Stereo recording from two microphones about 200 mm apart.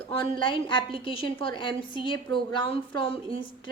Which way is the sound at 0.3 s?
25° left (ahead or behind).